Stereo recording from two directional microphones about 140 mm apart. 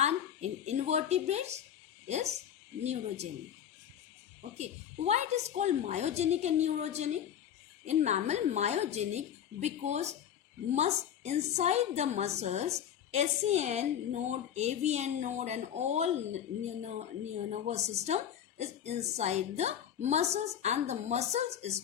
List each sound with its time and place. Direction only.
0.0 s a sound: 55° right (ahead or behind)
2.0 s a woman's voice: 55° right (ahead or behind)
4.5 s a woman's voice: 50° right (ahead or behind)
17.5 s a woman's voice: 50° right (ahead or behind)